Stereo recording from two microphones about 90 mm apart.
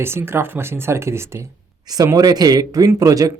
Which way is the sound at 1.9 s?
40° right (ahead or behind).